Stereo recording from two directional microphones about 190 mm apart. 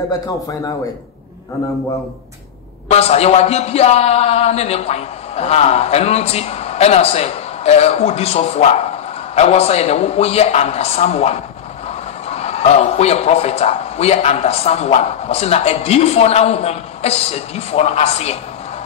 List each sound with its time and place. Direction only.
2.9 s a man's voice: 35° left (ahead or behind)